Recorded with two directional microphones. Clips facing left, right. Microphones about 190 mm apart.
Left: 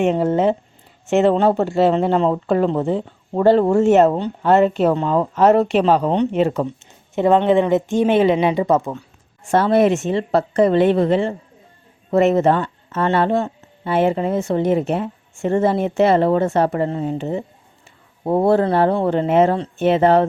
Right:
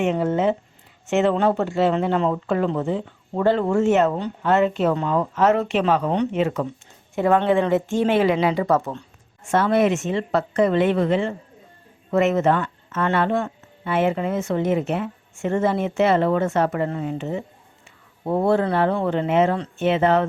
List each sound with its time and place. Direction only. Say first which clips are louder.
0.0 s speech: left 4 dB; 35° left (ahead or behind)
7.2 s speech: left 4 dB; 20° left (ahead or behind)
9.5 s speech: left 4 dB; 35° left (ahead or behind)